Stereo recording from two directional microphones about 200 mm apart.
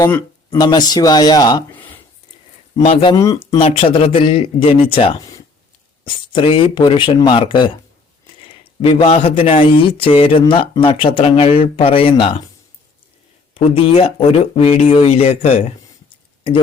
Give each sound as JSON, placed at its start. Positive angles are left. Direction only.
{"t": 0.1, "sound": "speech", "side_deg": 15}
{"t": 2.8, "sound": "speech", "side_deg": 30}
{"t": 3.2, "sound": "speech", "side_deg": 15}
{"t": 3.6, "sound": "speech", "side_deg": 30}
{"t": 13.5, "sound": "speech", "side_deg": 30}